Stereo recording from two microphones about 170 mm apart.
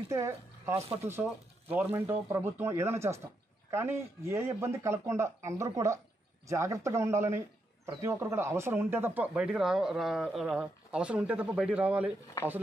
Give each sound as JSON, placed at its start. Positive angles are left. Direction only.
{"t": 0.1, "sound": "a man's voice", "side_deg": -15}